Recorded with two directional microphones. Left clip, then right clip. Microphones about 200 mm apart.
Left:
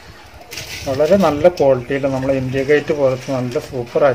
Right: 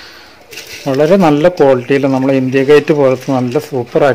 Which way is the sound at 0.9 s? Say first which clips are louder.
Right 4 dB; 55° right (ahead or behind).